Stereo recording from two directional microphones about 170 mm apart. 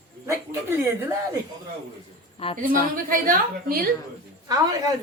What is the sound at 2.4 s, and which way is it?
Speech, 35° left (ahead or behind).